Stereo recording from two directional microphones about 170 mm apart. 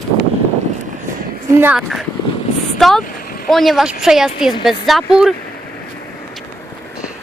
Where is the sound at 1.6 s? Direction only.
5° right (ahead or behind).